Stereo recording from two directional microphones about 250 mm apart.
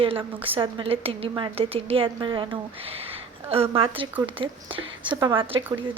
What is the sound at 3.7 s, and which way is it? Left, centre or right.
A woman's voice, right.